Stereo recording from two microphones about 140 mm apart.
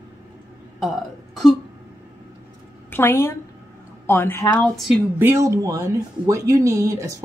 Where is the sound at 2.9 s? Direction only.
15° left (ahead or behind).